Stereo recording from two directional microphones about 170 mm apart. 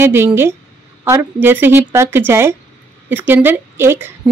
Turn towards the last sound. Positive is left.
turn(degrees=-15)  # may be behind; listen again after turning